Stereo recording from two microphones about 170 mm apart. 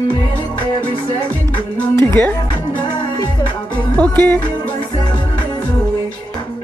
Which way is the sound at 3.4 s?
30° left (ahead or behind).